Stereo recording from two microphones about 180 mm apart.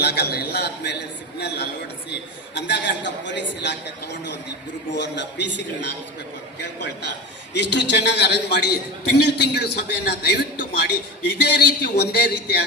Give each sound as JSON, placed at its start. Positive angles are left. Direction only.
{"t": 0.0, "sound": "a man's voice", "side_deg": 65}